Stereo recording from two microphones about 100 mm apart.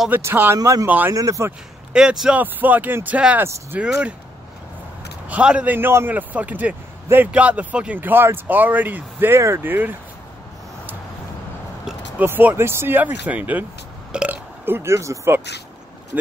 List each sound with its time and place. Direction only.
0.1 s speech: 20° right (ahead or behind)
0.6 s speech: 40° right (ahead or behind)
0.8 s a man's voice: 15° right (ahead or behind)
1.1 s speech: 35° right (ahead or behind)
2.0 s a man's voice: 5° right (ahead or behind)
5.3 s a man's voice: 10° right (ahead or behind)
12.2 s a man's voice: 20° right (ahead or behind)